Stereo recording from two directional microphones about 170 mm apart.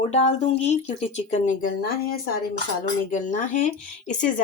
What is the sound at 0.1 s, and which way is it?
Speech, 40° left (ahead or behind).